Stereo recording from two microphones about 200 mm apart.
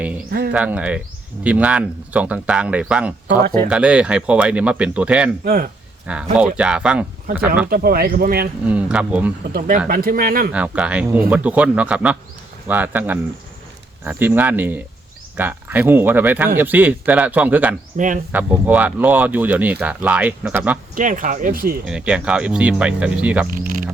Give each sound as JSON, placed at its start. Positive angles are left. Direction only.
{"t": 0.3, "sound": "speech", "side_deg": -50}
{"t": 0.5, "sound": "speech", "side_deg": -5}
{"t": 5.5, "sound": "speech", "side_deg": -45}
{"t": 6.1, "sound": "speech", "side_deg": -5}
{"t": 7.7, "sound": "speech", "side_deg": -50}
{"t": 8.6, "sound": "speech", "side_deg": -5}
{"t": 9.5, "sound": "speech", "side_deg": -45}
{"t": 10.5, "sound": "speech", "side_deg": -5}
{"t": 17.9, "sound": "speech", "side_deg": -40}
{"t": 18.3, "sound": "speech", "side_deg": -10}
{"t": 20.9, "sound": "speech", "side_deg": -40}
{"t": 21.8, "sound": "speech", "side_deg": -5}
{"t": 23.5, "sound": "mechanisms", "side_deg": -45}